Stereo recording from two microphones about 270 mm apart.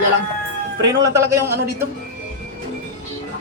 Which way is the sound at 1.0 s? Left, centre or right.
Centre.